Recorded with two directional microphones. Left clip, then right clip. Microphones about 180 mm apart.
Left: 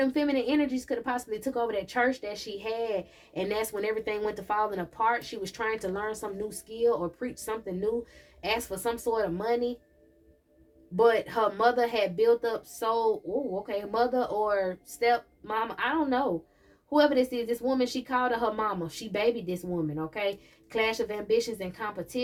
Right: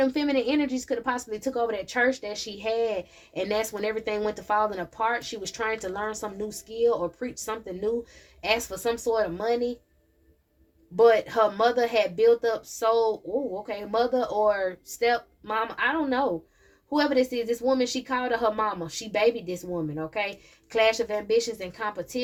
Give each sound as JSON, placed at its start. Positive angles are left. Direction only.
{"t": 0.0, "sound": "speech", "side_deg": -35}
{"t": 10.9, "sound": "speech", "side_deg": -35}
{"t": 20.7, "sound": "speech", "side_deg": -35}